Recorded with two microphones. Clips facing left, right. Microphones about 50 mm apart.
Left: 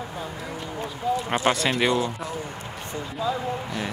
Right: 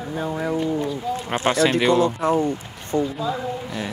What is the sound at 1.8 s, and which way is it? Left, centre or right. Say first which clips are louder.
Speech: right 3 dB; centre.